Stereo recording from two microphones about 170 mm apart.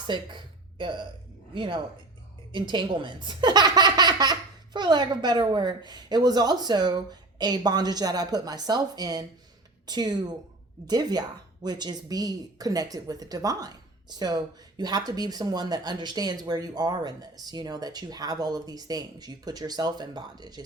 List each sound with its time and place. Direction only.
0.1 s speech: 25° right (ahead or behind)